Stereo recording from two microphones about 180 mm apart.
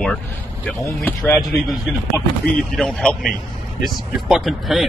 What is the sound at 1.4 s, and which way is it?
Speech, centre (ahead or behind).